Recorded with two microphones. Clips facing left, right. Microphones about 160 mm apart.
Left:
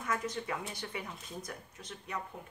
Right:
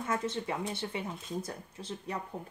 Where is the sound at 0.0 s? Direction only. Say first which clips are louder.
Right 3 dB; 25° right (ahead or behind).